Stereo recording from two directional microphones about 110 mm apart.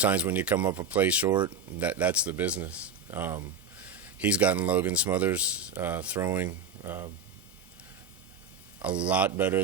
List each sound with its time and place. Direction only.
0.0 s speech: 15° right (ahead or behind)
9.0 s speech: 15° right (ahead or behind)